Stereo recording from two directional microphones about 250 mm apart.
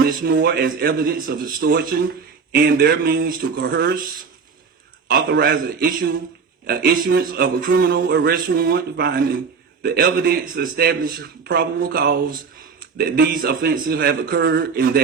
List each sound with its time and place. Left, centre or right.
0.3 s speech: right
5.1 s speech: right